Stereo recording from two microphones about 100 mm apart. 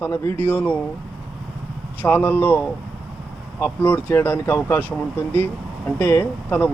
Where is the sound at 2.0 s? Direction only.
20° left (ahead or behind).